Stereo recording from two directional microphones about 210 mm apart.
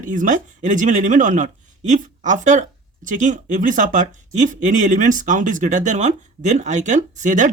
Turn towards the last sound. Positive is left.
turn(degrees=-35)  # may be behind; listen again after turning